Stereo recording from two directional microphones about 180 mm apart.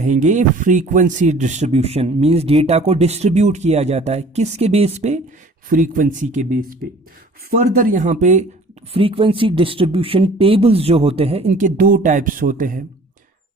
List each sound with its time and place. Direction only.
0.0 s speech: 40° right (ahead or behind)
7.5 s speech: 50° right (ahead or behind)
8.9 s speech: 30° right (ahead or behind)
11.8 s speech: 50° right (ahead or behind)